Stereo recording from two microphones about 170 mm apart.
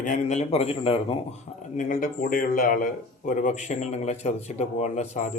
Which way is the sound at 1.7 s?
55° left (ahead or behind).